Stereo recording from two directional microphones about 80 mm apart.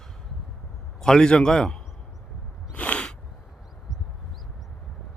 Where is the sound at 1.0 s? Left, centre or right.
Centre.